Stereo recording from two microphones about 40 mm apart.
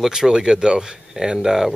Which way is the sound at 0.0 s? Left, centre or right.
Centre.